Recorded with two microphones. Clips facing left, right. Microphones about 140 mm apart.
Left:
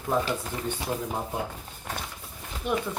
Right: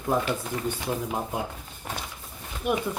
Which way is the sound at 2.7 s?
10° right (ahead or behind).